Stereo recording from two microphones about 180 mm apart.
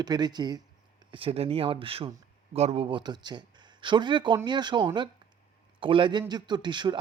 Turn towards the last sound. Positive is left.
turn(degrees=-25)  # may be behind; listen again after turning